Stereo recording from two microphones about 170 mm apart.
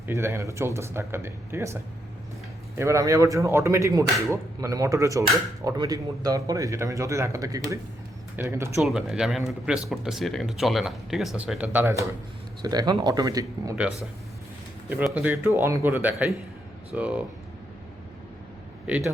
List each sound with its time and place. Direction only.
0.1 s a man's voice: 15° right (ahead or behind)
8.8 s a man's voice: centre (ahead or behind); by 13.7 s 20° right (ahead or behind)
14.8 s speech: 10° right (ahead or behind)